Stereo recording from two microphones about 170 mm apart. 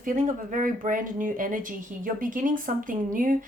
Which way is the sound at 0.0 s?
50° right (ahead or behind).